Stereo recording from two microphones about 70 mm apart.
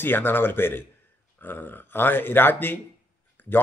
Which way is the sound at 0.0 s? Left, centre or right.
Left.